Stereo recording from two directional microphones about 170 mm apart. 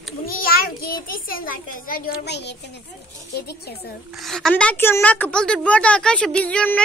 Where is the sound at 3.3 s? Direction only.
70° left (ahead or behind).